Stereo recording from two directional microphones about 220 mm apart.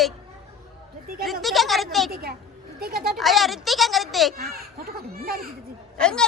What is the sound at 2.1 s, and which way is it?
Speech, 45° right (ahead or behind).